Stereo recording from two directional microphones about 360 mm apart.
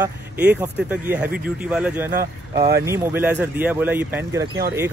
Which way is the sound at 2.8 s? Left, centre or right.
Centre.